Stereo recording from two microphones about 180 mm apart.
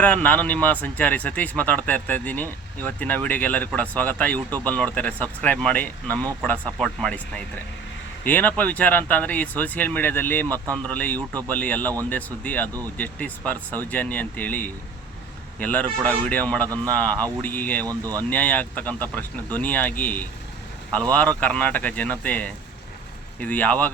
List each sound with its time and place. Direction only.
0.0 s speech: 10° left (ahead or behind)
17.8 s speech: 20° right (ahead or behind)
18.2 s speech: 10° left (ahead or behind)